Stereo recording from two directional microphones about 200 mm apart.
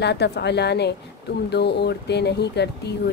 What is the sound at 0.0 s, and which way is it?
Speech, 55° left (ahead or behind).